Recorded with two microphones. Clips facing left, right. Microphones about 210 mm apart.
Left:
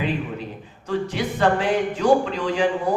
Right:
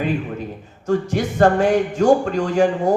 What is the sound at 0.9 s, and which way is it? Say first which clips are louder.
Speech: right 4 dB; 45° right (ahead or behind).